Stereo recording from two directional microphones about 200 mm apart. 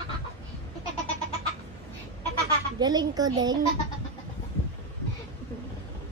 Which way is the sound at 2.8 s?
20° right (ahead or behind).